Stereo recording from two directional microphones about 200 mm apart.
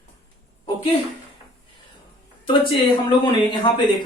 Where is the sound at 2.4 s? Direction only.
25° left (ahead or behind).